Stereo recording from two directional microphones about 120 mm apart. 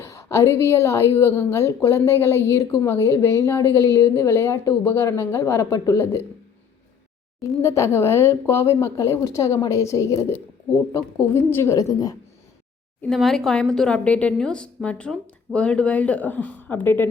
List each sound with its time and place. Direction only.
0.0 s a woman's voice: 25° left (ahead or behind)
7.4 s a woman's voice: 25° left (ahead or behind)
13.1 s a woman's voice: centre (ahead or behind); by 17.1 s 15° left (ahead or behind)